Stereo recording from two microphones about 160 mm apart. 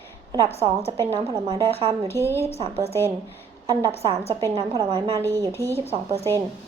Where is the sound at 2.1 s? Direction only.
15° left (ahead or behind).